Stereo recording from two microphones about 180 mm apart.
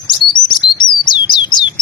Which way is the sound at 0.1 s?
25° left (ahead or behind).